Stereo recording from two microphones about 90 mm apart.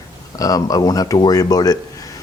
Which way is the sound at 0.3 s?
45° left (ahead or behind).